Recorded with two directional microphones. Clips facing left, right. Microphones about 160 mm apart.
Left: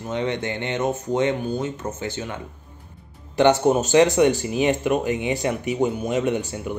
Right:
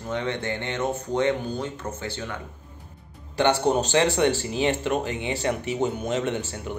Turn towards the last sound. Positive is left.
turn(degrees=15)  # may be behind; listen again after turning